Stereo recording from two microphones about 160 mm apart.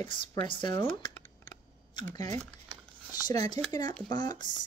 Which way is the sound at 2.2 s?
45° right (ahead or behind).